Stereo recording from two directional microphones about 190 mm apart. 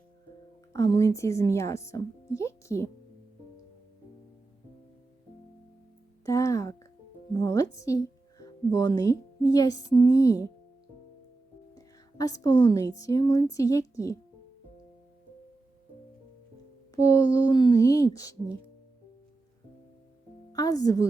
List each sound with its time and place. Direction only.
0.7 s speech: 15° left (ahead or behind)
6.2 s speech: 15° left (ahead or behind)
11.7 s music: 20° left (ahead or behind)
13.0 s speech: 20° left (ahead or behind)
16.9 s speech: 20° left (ahead or behind)
20.5 s a woman's voice: 20° left (ahead or behind)